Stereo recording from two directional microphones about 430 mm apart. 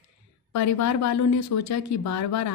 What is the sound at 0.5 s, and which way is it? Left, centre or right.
Speech, left.